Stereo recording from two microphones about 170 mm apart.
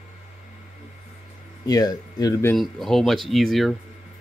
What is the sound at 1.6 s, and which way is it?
Speech, 20° left (ahead or behind).